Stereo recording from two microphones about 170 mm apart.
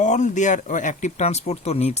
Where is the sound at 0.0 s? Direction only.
45° left (ahead or behind).